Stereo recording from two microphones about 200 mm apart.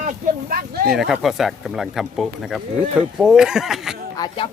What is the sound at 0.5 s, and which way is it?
Speech, 50° right (ahead or behind).